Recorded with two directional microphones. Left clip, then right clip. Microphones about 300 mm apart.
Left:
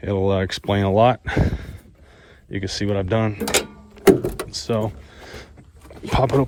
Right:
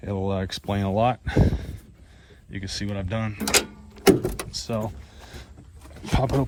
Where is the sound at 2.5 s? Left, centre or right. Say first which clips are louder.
Left 8 dB; left.